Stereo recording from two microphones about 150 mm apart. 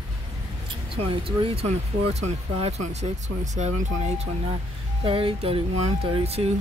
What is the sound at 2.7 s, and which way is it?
Speech, 45° right (ahead or behind).